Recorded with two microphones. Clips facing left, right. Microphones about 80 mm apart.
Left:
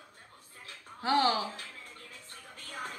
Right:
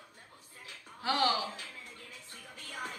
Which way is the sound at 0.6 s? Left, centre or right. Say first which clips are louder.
Left 3 dB; left.